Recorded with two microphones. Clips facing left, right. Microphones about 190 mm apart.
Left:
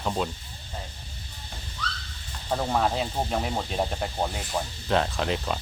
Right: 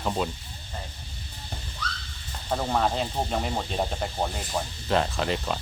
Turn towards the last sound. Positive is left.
turn(degrees=0)  # may be behind; listen again after turning